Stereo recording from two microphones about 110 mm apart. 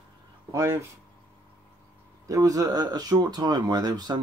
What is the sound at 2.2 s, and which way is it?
Speech, 30° right (ahead or behind).